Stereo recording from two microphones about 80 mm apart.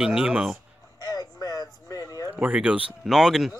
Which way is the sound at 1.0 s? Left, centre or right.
Left.